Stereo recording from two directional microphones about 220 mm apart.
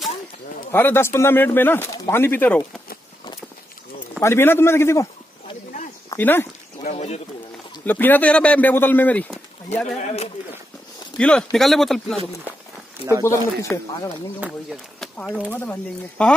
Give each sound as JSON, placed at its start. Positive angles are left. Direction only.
{"t": 0.7, "sound": "speech", "side_deg": 10}
{"t": 4.2, "sound": "speech", "side_deg": 10}
{"t": 6.0, "sound": "speech", "side_deg": 10}
{"t": 6.8, "sound": "speech", "side_deg": 30}
{"t": 7.8, "sound": "speech", "side_deg": 10}
{"t": 9.9, "sound": "speech", "side_deg": 30}
{"t": 11.1, "sound": "a man's voice", "side_deg": 5}
{"t": 13.2, "sound": "speech", "side_deg": 15}
{"t": 14.4, "sound": "a man's voice", "side_deg": 0}